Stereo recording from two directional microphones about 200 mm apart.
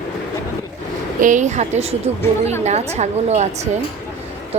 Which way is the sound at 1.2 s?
40° right (ahead or behind).